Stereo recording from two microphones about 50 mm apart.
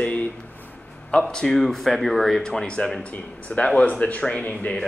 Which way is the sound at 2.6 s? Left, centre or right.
Centre.